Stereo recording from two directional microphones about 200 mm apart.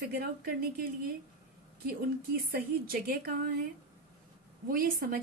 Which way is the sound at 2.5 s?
50° right (ahead or behind).